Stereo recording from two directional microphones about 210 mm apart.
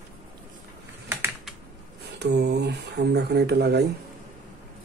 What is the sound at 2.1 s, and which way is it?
Speech, 50° right (ahead or behind).